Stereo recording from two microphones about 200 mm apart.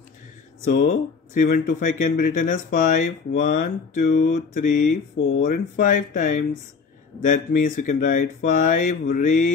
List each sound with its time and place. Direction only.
0.7 s speech: 45° left (ahead or behind)